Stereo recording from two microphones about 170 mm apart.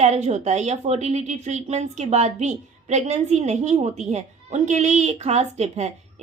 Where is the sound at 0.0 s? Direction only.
40° right (ahead or behind).